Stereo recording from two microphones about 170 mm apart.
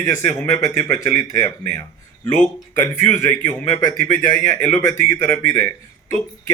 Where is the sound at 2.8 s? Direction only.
15° left (ahead or behind).